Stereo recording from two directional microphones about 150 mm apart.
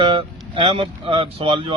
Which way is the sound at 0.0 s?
35° right (ahead or behind).